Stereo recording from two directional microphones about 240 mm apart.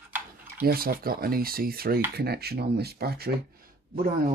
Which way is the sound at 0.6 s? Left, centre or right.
Right.